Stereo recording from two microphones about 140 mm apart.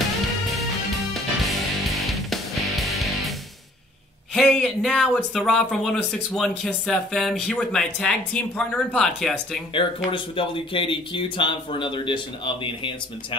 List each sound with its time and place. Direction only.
0.5 s music: centre (ahead or behind)
4.3 s speech: 5° left (ahead or behind)
9.8 s speech: 40° left (ahead or behind)